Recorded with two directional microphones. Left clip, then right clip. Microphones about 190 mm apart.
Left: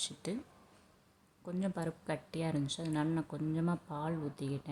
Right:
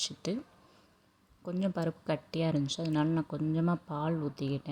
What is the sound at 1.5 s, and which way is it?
Speech, 20° right (ahead or behind).